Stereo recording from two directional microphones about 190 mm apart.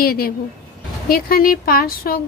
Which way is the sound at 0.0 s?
50° left (ahead or behind).